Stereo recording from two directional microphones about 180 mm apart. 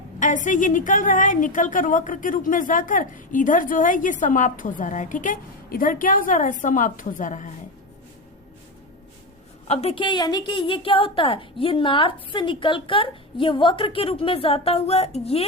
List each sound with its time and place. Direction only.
0.2 s a woman's voice: 45° left (ahead or behind)
9.6 s a woman's voice: 35° left (ahead or behind)